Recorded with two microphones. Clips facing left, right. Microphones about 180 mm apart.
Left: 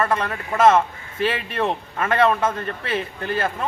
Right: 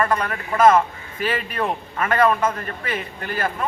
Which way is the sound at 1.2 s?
25° left (ahead or behind).